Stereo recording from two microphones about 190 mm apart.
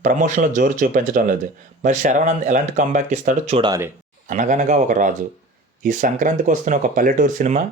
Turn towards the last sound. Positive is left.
turn(degrees=-40)  # may be behind; listen again after turning